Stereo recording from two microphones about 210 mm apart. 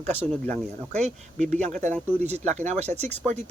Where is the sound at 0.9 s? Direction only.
30° right (ahead or behind).